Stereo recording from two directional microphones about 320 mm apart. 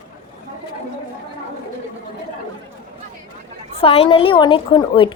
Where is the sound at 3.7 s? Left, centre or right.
Centre.